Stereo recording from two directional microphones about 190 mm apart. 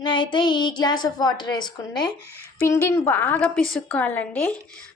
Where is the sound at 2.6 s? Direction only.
15° left (ahead or behind).